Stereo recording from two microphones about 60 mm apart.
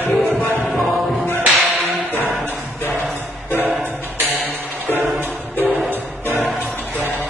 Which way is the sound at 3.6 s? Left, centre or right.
Right.